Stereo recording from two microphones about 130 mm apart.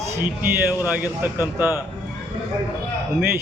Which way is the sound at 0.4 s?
15° right (ahead or behind).